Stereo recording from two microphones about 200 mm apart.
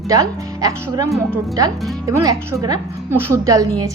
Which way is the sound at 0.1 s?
20° right (ahead or behind).